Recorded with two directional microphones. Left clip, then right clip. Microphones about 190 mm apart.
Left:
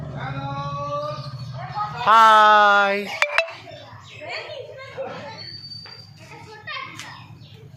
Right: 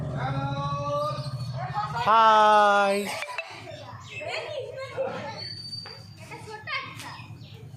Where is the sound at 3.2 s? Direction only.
45° left (ahead or behind).